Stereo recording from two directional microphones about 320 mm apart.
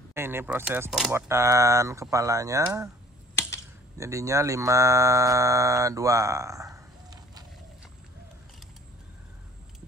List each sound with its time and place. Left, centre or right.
0.1 s speech: centre
3.3 s a sound: centre
4.0 s speech: centre